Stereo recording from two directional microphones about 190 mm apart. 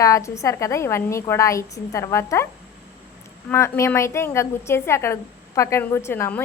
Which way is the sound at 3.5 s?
15° left (ahead or behind).